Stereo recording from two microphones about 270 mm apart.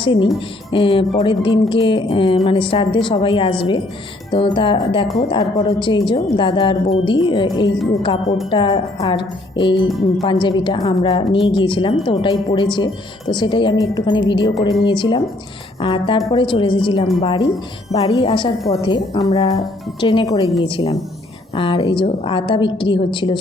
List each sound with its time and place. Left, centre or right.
0.0 s speech: centre
0.3 s music: centre
5.3 s a woman's voice: centre
15.8 s music: centre
16.3 s a woman's voice: centre
17.2 s music: centre
18.7 s a woman's voice: centre
19.3 s music: left